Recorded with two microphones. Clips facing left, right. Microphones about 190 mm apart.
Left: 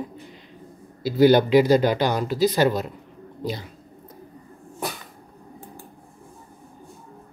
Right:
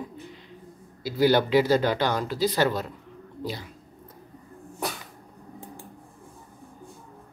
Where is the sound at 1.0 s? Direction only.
20° left (ahead or behind).